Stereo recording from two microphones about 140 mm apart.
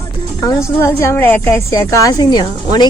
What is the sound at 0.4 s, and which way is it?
Speech, 20° left (ahead or behind).